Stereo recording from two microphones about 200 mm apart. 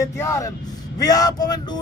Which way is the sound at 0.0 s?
15° left (ahead or behind).